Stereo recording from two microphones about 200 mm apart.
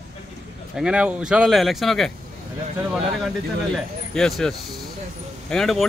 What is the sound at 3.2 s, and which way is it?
Speech, centre (ahead or behind).